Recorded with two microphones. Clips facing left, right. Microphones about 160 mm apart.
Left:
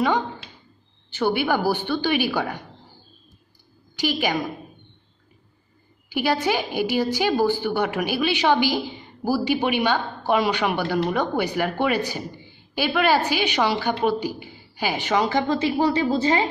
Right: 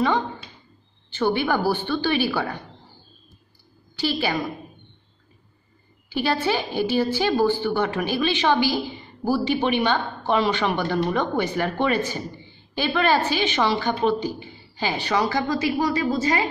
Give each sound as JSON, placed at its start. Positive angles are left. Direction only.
{"t": 1.1, "sound": "a woman's voice", "side_deg": 10}
{"t": 3.9, "sound": "a woman's voice", "side_deg": 15}
{"t": 6.0, "sound": "a woman's voice", "side_deg": 15}